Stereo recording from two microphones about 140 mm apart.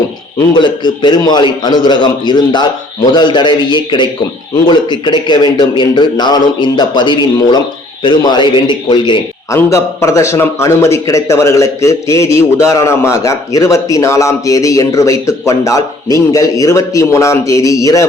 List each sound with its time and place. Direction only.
0.3 s a man's voice: 30° left (ahead or behind)
9.5 s a man's voice: 20° left (ahead or behind)